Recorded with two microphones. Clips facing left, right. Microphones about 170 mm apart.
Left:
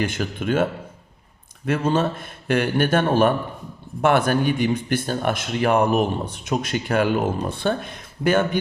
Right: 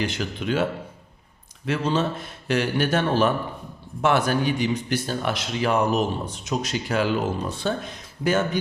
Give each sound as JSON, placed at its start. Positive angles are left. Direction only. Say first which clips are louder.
{"t": 0.0, "sound": "a man's voice", "louder": "left 3 dB", "side_deg": 50}